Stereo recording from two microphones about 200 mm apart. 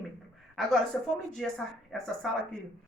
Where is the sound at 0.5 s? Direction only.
Centre (ahead or behind).